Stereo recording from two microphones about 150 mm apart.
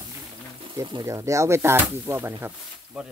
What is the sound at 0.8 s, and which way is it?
Speech, 25° right (ahead or behind).